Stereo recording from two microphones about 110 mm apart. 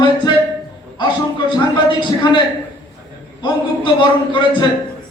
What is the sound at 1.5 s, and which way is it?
Speech, 45° left (ahead or behind).